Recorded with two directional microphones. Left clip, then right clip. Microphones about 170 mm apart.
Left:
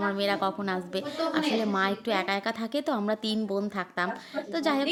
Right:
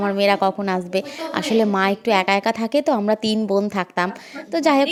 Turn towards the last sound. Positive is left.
turn(degrees=-45)  # may be behind; listen again after turning